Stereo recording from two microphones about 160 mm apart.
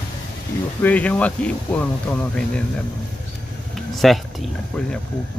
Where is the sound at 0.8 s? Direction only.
10° left (ahead or behind).